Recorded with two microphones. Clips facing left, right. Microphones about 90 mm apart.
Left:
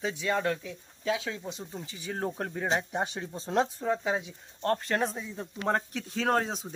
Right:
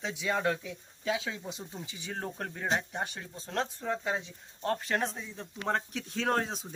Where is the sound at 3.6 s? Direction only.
5° left (ahead or behind).